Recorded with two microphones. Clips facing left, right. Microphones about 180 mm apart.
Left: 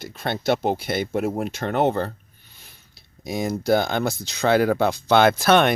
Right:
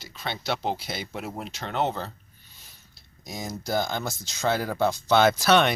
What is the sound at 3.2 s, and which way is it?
Speech, 60° left (ahead or behind).